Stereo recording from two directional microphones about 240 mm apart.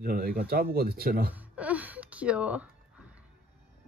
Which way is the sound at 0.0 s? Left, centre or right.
Right.